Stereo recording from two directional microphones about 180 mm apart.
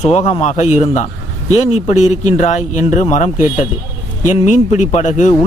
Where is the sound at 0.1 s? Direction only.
35° left (ahead or behind).